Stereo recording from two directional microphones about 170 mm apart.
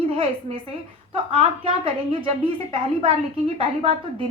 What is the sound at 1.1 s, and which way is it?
A woman's voice, 35° right (ahead or behind).